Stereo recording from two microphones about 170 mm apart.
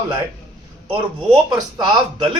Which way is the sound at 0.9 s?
30° right (ahead or behind).